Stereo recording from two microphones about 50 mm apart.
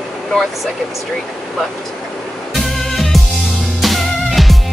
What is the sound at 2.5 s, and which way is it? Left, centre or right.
Music, centre.